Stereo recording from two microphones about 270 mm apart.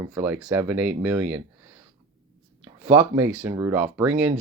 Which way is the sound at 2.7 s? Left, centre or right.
Centre.